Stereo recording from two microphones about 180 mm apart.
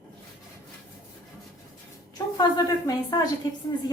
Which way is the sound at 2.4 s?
20° left (ahead or behind).